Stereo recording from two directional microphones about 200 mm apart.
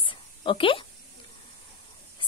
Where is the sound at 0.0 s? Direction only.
25° left (ahead or behind).